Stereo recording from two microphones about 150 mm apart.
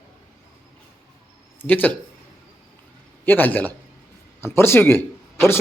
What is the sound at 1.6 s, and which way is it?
Speech, 10° left (ahead or behind).